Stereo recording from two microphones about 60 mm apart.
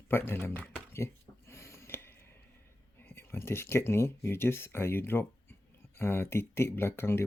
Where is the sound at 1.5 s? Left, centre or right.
Left.